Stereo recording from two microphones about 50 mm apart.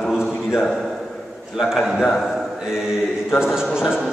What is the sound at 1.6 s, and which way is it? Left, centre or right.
A man's voice, centre.